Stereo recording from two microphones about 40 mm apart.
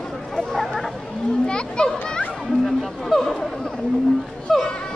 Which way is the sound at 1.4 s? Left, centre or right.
Left.